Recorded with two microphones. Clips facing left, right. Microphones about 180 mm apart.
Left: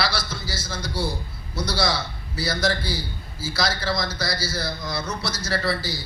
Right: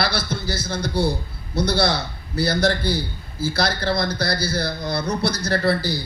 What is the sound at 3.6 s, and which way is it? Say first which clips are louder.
A man's voice: right 2 dB; 60° right (ahead or behind).